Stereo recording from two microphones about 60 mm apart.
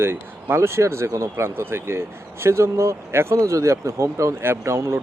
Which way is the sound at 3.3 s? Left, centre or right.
Right.